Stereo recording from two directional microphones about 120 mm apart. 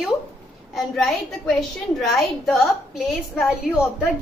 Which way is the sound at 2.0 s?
Centre (ahead or behind).